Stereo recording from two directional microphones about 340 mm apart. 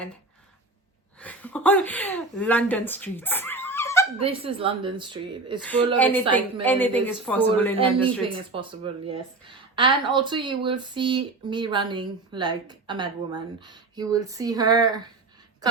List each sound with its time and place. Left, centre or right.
1.2 s speech: centre
4.2 s speech: centre
6.0 s a woman's voice: centre
8.5 s speech: centre